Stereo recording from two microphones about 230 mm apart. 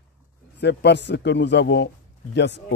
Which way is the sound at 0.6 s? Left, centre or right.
Left.